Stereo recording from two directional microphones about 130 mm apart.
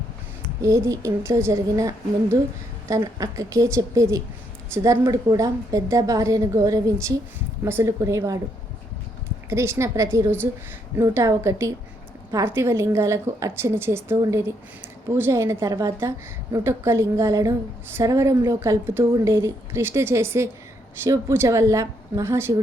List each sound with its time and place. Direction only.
0.6 s a woman's voice: 25° right (ahead or behind)
3.0 s a woman's voice: 25° right (ahead or behind)
9.5 s a woman's voice: 20° right (ahead or behind)